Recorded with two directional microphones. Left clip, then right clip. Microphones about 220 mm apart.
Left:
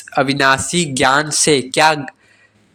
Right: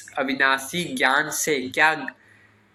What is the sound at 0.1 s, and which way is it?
Speech, 55° left (ahead or behind).